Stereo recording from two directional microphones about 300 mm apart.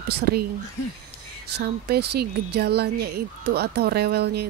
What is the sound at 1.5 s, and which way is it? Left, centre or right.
Speech, right.